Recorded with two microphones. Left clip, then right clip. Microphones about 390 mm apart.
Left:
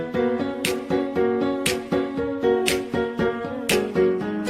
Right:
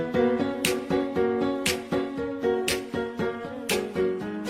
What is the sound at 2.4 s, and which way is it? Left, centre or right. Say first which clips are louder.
Music: left 5 dB; left.